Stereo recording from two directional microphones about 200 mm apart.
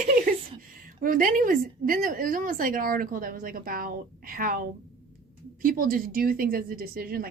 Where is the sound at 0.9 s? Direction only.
45° right (ahead or behind).